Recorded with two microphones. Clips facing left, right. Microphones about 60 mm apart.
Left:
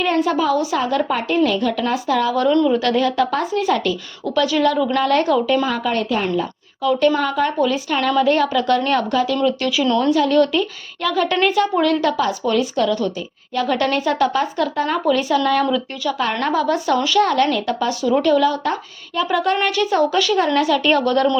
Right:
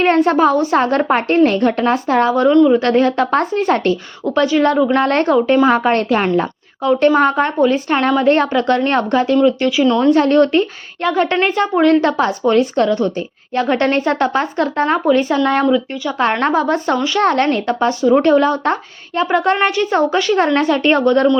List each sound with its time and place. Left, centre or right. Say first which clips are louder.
0.0 s a woman's voice: right 6 dB; right
4.4 s a woman's voice: right 3 dB; right
4.9 s a woman's voice: right 3 dB; right
6.8 s a woman's voice: right 5 dB; right
10.1 s a woman's voice: right 4 dB; right